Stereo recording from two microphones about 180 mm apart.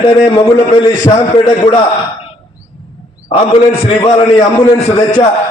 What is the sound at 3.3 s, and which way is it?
A man's voice, 35° left (ahead or behind).